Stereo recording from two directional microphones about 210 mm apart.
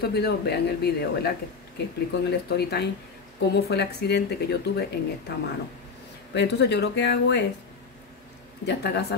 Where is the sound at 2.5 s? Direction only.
50° left (ahead or behind).